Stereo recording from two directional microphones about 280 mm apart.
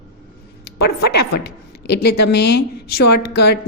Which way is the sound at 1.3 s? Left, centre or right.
Left.